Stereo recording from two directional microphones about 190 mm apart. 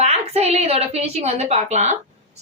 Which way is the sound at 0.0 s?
35° right (ahead or behind).